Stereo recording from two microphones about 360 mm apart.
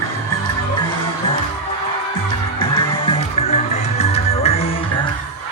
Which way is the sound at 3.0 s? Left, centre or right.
Centre.